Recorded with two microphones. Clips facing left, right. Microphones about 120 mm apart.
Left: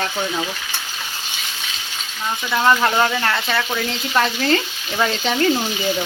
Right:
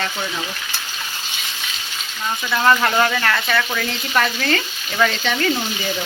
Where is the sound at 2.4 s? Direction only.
15° left (ahead or behind).